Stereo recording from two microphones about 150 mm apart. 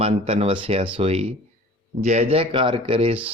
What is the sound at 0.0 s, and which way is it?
Speech, 40° right (ahead or behind).